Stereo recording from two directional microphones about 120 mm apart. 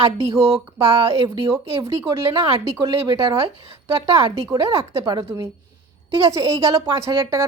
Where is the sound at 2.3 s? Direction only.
40° right (ahead or behind).